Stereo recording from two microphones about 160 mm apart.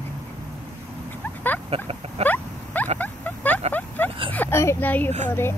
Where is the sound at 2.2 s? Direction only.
10° left (ahead or behind).